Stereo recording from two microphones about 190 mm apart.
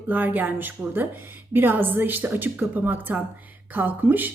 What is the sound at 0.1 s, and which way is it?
A woman's voice, 10° right (ahead or behind).